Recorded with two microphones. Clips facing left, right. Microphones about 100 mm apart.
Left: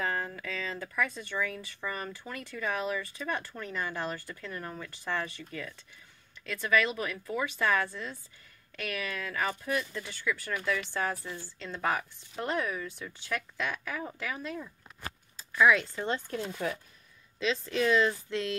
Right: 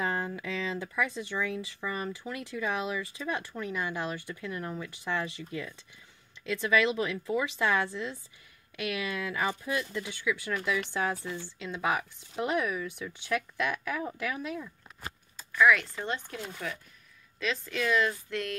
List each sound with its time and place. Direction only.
0.0 s speech: 15° right (ahead or behind)
15.5 s speech: 20° left (ahead or behind)
16.0 s speech: 35° left (ahead or behind)